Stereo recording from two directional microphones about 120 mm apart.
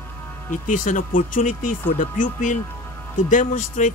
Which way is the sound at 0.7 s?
90° left.